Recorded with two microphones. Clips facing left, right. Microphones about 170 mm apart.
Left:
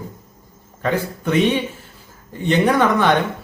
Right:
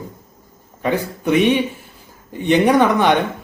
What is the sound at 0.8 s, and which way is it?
A man's voice, 15° right (ahead or behind).